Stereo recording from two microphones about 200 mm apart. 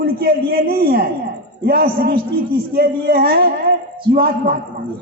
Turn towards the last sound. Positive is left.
turn(degrees=-45)  # may be behind; listen again after turning